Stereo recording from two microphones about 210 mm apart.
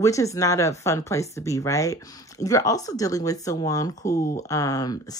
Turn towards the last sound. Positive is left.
turn(degrees=15)  # may be behind; listen again after turning